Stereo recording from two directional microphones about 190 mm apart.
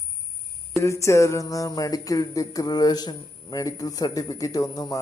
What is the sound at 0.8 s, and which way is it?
Speech, 15° left (ahead or behind).